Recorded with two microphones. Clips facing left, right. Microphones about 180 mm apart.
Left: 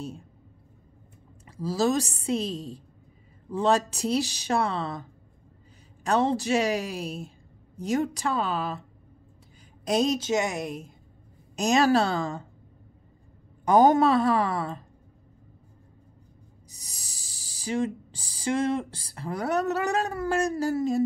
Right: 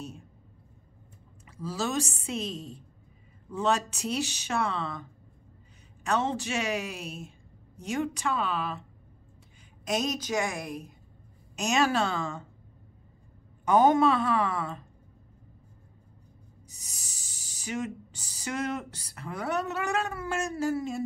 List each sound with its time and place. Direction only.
1.6 s speech: 35° left (ahead or behind)
6.0 s speech: 35° left (ahead or behind)
9.8 s a woman's voice: 30° left (ahead or behind)
11.5 s speech: 35° left (ahead or behind)
13.7 s speech: 40° left (ahead or behind)
16.6 s speech: 35° left (ahead or behind)